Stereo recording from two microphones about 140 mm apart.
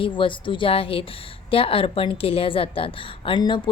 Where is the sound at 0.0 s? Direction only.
35° left (ahead or behind).